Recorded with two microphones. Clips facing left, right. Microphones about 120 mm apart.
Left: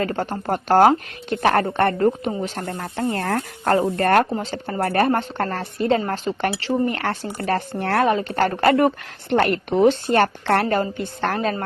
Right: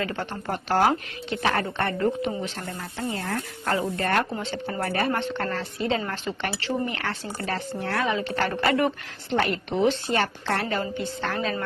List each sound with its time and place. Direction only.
0.0 s a woman's voice: 45° left (ahead or behind)